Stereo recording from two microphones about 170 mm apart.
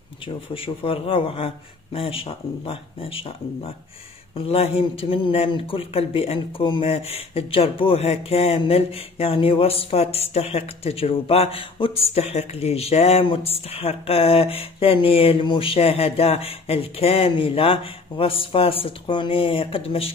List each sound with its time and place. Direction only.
0.6 s a man's voice: 30° left (ahead or behind)